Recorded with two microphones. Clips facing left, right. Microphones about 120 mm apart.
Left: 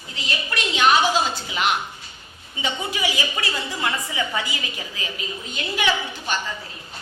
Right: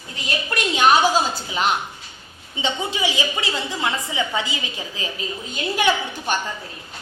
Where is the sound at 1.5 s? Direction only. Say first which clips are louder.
Right 3 dB; 35° right (ahead or behind).